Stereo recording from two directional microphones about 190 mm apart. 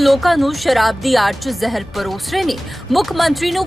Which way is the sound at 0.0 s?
Centre (ahead or behind).